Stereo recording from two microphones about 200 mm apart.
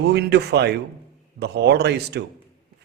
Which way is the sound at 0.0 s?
55° right (ahead or behind).